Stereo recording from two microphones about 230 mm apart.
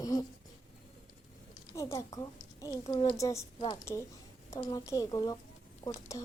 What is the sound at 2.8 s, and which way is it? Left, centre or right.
A woman's voice, left.